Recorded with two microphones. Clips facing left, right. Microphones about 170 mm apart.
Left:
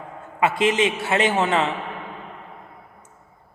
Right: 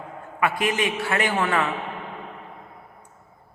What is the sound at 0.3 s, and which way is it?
A woman's voice, 25° left (ahead or behind).